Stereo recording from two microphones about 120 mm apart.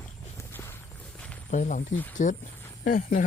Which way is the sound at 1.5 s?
90° left.